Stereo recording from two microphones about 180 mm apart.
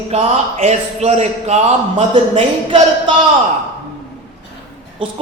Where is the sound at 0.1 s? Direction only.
35° right (ahead or behind).